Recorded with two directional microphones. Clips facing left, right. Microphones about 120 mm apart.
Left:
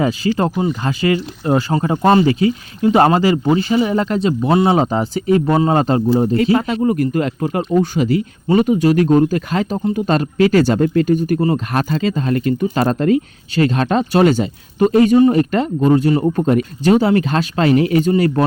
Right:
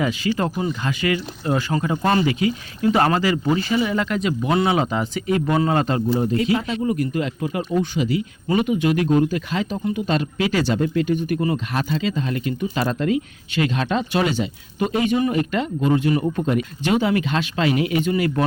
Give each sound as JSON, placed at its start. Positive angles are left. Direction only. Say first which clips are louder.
{"t": 0.0, "sound": "speech", "louder": "left 5 dB", "side_deg": 35}
{"t": 6.8, "sound": "speech", "louder": "left 6 dB", "side_deg": 50}
{"t": 16.3, "sound": "speech", "louder": "left 6 dB", "side_deg": 45}